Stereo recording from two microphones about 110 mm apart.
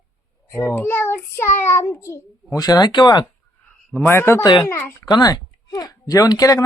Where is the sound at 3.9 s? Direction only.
20° left (ahead or behind).